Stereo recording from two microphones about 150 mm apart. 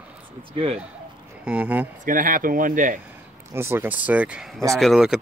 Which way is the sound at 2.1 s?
65° right (ahead or behind).